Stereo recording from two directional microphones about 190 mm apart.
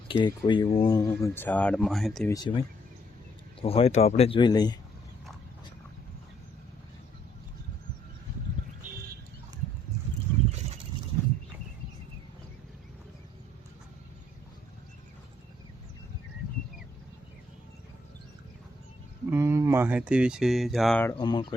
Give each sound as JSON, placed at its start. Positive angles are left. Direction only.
{"t": 0.1, "sound": "speech", "side_deg": 25}
{"t": 2.3, "sound": "speech", "side_deg": 25}
{"t": 19.3, "sound": "speech", "side_deg": -15}
{"t": 21.0, "sound": "speech", "side_deg": 20}